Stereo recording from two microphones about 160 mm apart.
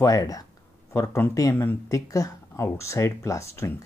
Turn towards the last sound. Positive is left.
turn(degrees=15)  # may be behind; listen again after turning